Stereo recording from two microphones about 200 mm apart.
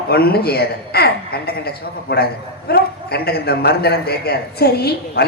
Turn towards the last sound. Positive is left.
turn(degrees=50)  # may be behind; listen again after turning